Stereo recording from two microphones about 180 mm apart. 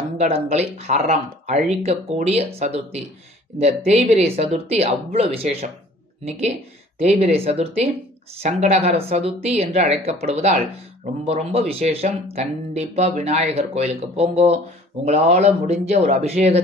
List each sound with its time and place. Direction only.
0.2 s speech: 35° right (ahead or behind)
7.0 s speech: 35° right (ahead or behind)